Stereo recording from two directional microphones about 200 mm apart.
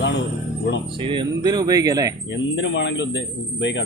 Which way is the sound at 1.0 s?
25° right (ahead or behind).